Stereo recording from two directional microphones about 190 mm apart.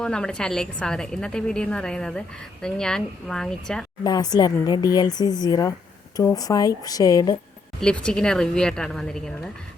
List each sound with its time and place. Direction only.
0.0 s a woman's voice: 5° left (ahead or behind)
4.0 s speech: 20° left (ahead or behind)
7.8 s a woman's voice: 5° left (ahead or behind)